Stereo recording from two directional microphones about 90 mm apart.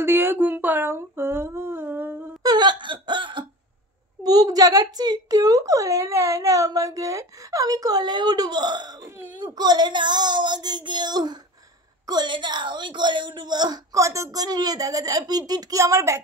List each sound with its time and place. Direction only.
0.0 s humming: 25° right (ahead or behind)
2.4 s wail: 55° right (ahead or behind)
4.2 s a child's voice: 45° right (ahead or behind)
9.0 s speech: 30° right (ahead or behind)
9.6 s a child's voice: 50° right (ahead or behind)
13.9 s a woman's voice: 35° right (ahead or behind)